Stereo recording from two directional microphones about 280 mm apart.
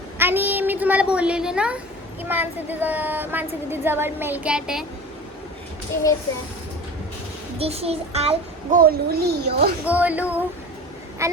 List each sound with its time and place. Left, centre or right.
0.2 s a woman's voice: centre
7.6 s a child's voice: right
9.8 s speech: centre